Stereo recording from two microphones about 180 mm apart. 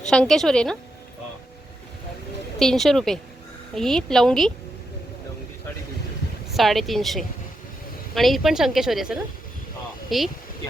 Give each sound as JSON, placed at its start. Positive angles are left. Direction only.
{"t": 0.1, "sound": "a woman's voice", "side_deg": 5}
{"t": 2.6, "sound": "a woman's voice", "side_deg": 0}
{"t": 6.5, "sound": "a woman's voice", "side_deg": 0}